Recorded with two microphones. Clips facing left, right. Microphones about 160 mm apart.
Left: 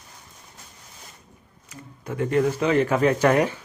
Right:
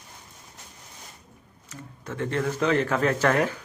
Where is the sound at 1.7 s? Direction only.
10° left (ahead or behind).